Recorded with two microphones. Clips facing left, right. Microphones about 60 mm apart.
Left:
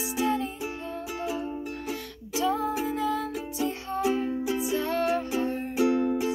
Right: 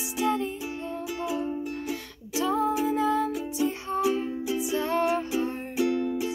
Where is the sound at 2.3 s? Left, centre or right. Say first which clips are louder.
Right 1 dB; centre.